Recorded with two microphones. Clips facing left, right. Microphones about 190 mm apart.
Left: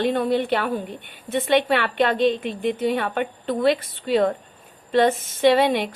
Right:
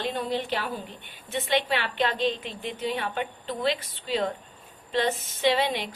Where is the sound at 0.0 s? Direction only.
60° left (ahead or behind).